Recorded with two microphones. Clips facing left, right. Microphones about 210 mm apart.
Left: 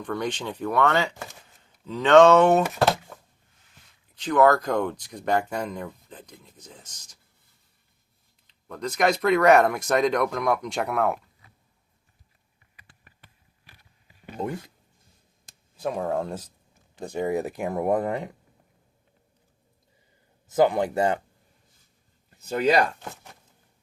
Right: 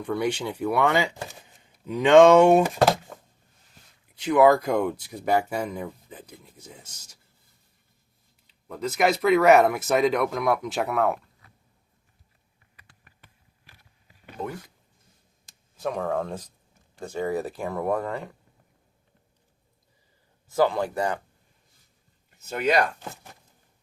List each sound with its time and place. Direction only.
0.0 s speech: 10° right (ahead or behind)
4.1 s speech: 10° right (ahead or behind)
8.6 s speech: 5° right (ahead or behind)
15.8 s speech: 10° left (ahead or behind)
20.5 s speech: 20° left (ahead or behind)
22.4 s speech: 35° left (ahead or behind)